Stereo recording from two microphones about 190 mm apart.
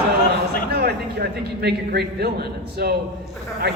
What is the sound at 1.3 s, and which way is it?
A man's voice, 55° right (ahead or behind).